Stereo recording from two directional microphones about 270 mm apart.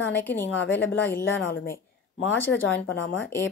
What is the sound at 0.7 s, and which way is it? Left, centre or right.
A woman's voice, left.